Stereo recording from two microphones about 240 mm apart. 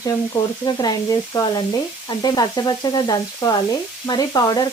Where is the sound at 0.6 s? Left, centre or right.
Centre.